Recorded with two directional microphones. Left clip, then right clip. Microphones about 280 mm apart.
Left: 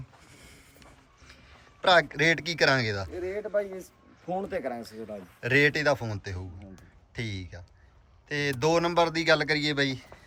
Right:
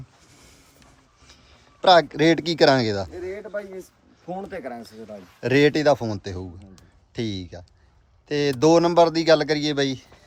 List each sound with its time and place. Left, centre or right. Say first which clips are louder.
0.3 s a sound: right 2 dB; centre
1.8 s speech: right 6 dB; centre
3.1 s speech: left 1 dB; centre
5.4 s speech: right 5 dB; centre